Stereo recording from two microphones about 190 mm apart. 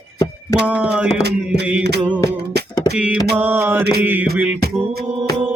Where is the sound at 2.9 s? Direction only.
5° right (ahead or behind).